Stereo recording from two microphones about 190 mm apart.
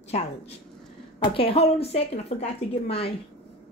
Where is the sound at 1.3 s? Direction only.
30° left (ahead or behind).